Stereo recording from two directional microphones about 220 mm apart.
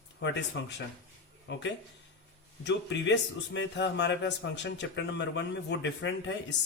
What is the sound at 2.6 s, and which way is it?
A man's voice, 55° left (ahead or behind).